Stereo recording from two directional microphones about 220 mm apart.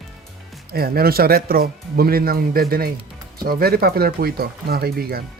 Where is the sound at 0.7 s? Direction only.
45° right (ahead or behind).